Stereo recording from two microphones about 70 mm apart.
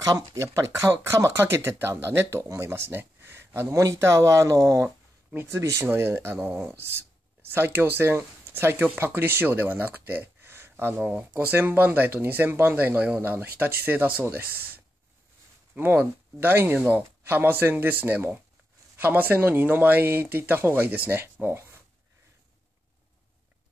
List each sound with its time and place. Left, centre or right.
0.0 s speech: right
3.7 s speech: right
4.8 s a sound: right
5.5 s speech: right
5.9 s speech: right
6.3 s speech: right
7.4 s speech: right
11.0 s speech: centre
16.7 s speech: centre
17.2 s speech: right